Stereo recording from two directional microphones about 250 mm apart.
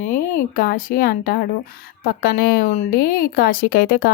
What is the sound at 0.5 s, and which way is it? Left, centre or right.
Speech, left.